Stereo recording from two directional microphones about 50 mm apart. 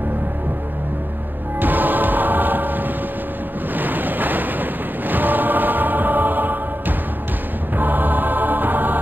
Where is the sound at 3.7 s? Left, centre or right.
Right.